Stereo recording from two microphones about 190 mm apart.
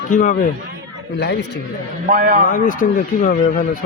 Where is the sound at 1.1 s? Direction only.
65° left (ahead or behind).